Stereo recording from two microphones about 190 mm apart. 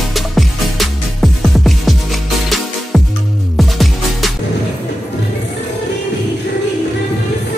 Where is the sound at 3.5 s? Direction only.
Centre (ahead or behind).